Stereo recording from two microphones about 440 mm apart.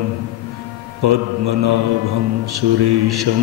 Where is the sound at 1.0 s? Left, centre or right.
Right.